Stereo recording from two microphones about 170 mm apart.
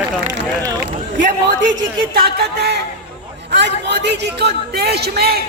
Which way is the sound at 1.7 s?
60° right (ahead or behind).